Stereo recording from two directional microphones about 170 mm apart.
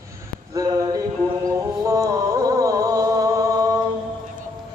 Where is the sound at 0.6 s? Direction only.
25° right (ahead or behind).